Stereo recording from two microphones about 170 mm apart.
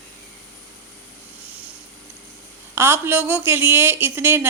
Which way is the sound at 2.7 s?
15° right (ahead or behind).